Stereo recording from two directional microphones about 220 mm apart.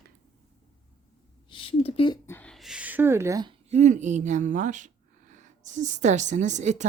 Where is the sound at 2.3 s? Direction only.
5° left (ahead or behind); by 3.6 s 15° right (ahead or behind).